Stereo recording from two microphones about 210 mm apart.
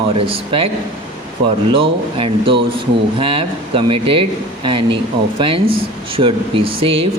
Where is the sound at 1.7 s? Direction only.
25° right (ahead or behind).